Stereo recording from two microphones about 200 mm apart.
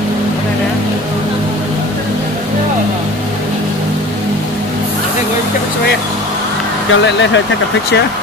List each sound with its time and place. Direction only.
6.9 s speech: 65° left (ahead or behind)